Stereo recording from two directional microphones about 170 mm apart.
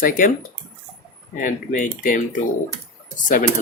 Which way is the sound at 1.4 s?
50° left (ahead or behind).